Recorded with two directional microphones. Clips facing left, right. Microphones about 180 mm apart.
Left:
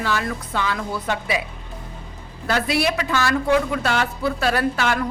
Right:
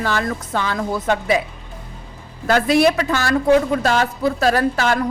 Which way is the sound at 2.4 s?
45° right (ahead or behind).